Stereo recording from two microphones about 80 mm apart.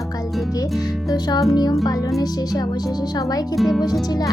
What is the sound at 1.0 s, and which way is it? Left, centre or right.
Speech, left.